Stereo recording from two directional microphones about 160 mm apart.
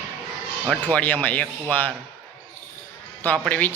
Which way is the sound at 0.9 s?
10° left (ahead or behind).